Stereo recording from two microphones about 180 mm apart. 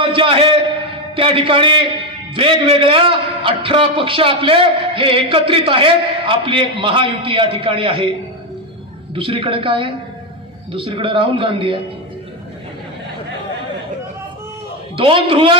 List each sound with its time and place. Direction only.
0.0 s a sound: 30° right (ahead or behind)
1.1 s a man's voice: 30° right (ahead or behind)
9.1 s a man's voice: 30° right (ahead or behind)
15.0 s a man's voice: 30° right (ahead or behind)